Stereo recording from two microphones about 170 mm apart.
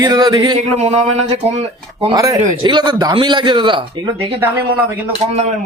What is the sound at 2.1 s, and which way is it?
A man's voice, 20° right (ahead or behind).